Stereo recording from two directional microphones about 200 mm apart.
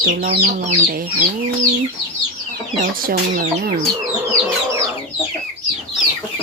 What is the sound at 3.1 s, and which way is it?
Speech, 45° right (ahead or behind).